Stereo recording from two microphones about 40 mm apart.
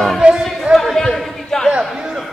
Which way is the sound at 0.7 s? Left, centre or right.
Centre.